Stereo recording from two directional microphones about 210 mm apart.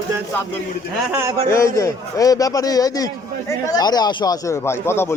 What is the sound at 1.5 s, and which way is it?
A man's voice, 15° left (ahead or behind).